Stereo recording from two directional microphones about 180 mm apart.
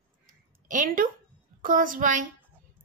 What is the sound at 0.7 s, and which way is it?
A woman's voice, 50° right (ahead or behind).